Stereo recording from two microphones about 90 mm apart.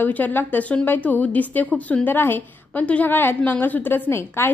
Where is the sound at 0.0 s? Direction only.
20° left (ahead or behind).